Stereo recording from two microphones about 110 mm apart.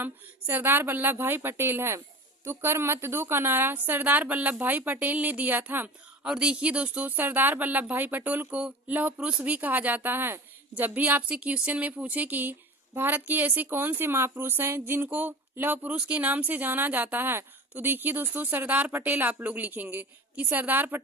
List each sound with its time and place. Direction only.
0.0 s a woman's voice: 20° right (ahead or behind)